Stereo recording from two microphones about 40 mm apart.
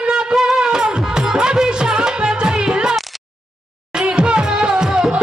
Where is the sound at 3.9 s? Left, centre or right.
Right.